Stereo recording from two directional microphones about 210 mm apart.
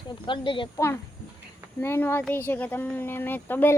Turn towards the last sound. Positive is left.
turn(degrees=10)  # may be behind; listen again after turning